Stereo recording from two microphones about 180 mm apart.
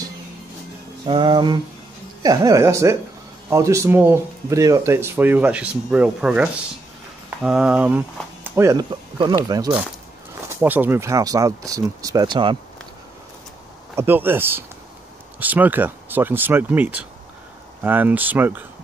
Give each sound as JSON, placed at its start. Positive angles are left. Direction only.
{"t": 1.0, "sound": "speech", "side_deg": -25}
{"t": 10.6, "sound": "speech", "side_deg": -10}
{"t": 13.9, "sound": "speech", "side_deg": -10}